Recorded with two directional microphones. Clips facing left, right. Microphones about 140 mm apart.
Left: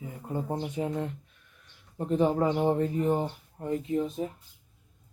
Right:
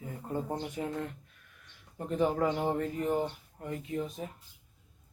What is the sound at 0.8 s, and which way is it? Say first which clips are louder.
Speech: left 4 dB; 20° left (ahead or behind).